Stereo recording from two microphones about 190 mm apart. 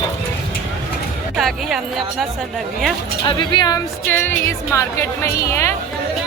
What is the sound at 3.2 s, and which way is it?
A woman's voice, 25° left (ahead or behind).